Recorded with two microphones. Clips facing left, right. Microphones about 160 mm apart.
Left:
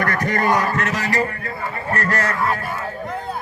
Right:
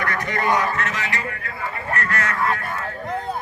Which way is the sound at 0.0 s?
45° left (ahead or behind).